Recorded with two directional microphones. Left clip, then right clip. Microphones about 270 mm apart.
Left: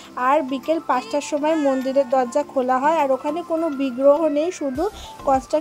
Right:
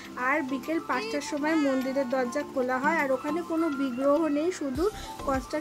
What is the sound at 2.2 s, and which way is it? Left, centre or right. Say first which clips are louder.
Speech: left 8 dB; centre.